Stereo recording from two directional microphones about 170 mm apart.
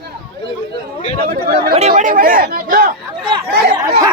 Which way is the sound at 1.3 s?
60° right (ahead or behind).